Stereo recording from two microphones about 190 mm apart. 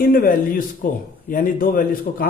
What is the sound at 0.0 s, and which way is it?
A man's voice, 50° left (ahead or behind).